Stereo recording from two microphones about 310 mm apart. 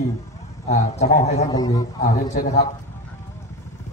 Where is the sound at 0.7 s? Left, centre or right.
Left.